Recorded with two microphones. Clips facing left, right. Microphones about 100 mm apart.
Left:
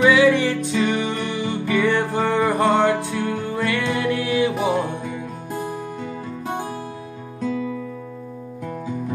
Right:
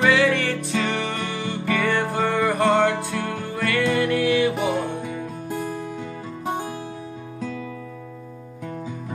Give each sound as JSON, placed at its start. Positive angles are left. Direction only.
{"t": 0.0, "sound": "music", "side_deg": 15}